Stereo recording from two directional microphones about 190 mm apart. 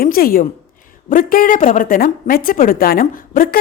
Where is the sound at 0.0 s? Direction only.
50° left (ahead or behind).